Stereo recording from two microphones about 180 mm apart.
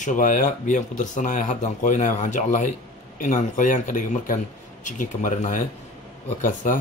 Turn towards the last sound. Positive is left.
turn(degrees=45)  # may be behind; listen again after turning